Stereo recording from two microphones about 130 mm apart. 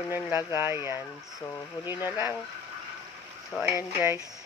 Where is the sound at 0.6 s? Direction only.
20° right (ahead or behind).